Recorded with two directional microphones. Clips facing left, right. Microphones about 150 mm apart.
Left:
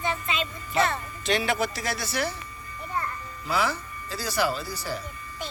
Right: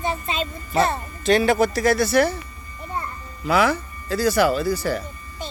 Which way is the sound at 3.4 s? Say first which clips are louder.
Right 8 dB; 60° right (ahead or behind).